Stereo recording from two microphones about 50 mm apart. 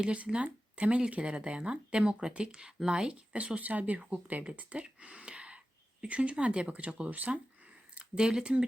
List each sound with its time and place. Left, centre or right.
0.0 s speech: right
7.9 s speech: centre